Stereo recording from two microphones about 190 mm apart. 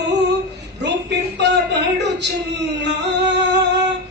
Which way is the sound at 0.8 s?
65° right (ahead or behind).